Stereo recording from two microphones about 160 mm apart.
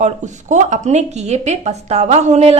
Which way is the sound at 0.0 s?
50° right (ahead or behind).